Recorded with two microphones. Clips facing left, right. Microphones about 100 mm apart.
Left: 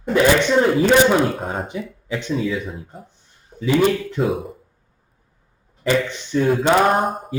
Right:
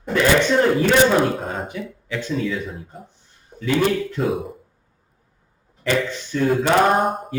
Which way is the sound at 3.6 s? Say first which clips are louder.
Left 2 dB; 15° left (ahead or behind).